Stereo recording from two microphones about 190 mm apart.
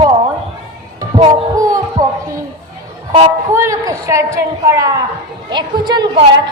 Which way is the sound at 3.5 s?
15° right (ahead or behind).